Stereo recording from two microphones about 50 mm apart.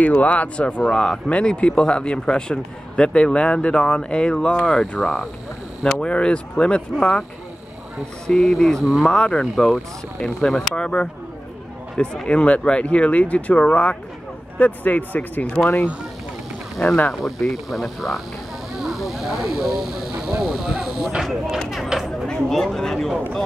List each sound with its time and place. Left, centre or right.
0.2 s speech: left; by 5.3 s centre
5.9 s speech: left
8.3 s speech: centre
8.8 s speech: centre
9.1 s speech: centre
10.7 s speech: centre
17.1 s speech: centre
21.8 s a sound: centre
22.5 s speech: centre